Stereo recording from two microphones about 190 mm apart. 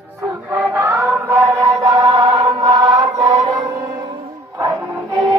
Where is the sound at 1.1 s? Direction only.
15° right (ahead or behind).